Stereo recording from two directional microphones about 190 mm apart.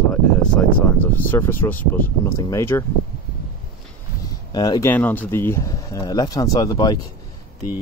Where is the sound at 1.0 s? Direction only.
10° left (ahead or behind).